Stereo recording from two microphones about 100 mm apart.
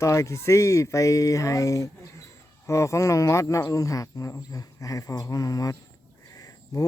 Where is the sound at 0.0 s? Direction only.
30° left (ahead or behind).